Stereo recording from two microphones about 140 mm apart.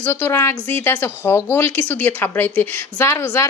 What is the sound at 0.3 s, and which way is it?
A woman's voice, 25° left (ahead or behind).